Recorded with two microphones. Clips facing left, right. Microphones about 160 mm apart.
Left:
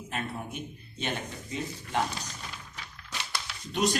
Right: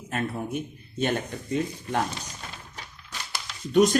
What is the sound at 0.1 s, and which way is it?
Speech, 45° right (ahead or behind).